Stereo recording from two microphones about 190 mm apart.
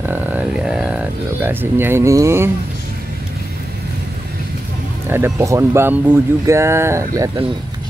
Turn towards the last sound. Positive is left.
turn(degrees=-25)  # may be behind; listen again after turning